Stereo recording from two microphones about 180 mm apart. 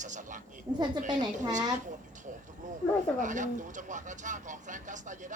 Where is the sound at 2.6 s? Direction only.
45° right (ahead or behind).